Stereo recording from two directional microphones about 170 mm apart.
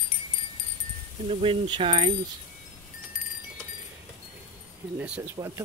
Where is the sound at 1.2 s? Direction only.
35° right (ahead or behind).